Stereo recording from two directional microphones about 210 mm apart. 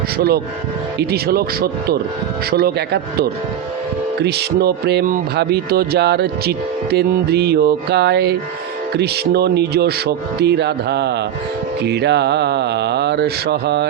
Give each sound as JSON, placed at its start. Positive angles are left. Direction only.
{"t": 0.9, "sound": "speech", "side_deg": -50}